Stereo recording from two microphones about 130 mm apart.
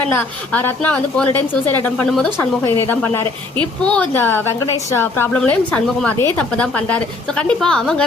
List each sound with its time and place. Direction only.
0.1 s a woman's voice: 15° left (ahead or behind)
2.4 s a woman's voice: 15° left (ahead or behind)